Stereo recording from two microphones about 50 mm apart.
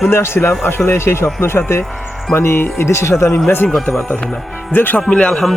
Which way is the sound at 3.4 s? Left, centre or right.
Left.